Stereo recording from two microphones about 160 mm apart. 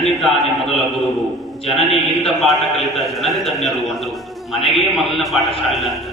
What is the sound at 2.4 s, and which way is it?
A man's voice, centre (ahead or behind).